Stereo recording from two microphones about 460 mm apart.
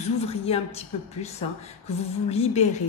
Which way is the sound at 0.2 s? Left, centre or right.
Centre.